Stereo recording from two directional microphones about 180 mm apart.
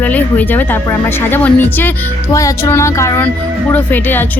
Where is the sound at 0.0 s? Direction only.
10° left (ahead or behind).